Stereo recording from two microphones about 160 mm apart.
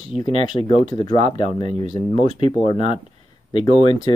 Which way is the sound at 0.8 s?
30° left (ahead or behind).